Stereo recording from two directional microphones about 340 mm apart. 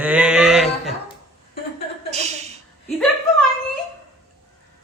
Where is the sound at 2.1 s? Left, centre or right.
Centre.